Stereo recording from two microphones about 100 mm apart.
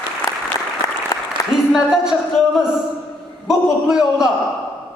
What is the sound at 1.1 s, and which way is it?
Applause, 35° left (ahead or behind).